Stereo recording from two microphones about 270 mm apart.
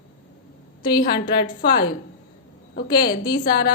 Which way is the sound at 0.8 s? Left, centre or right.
Centre.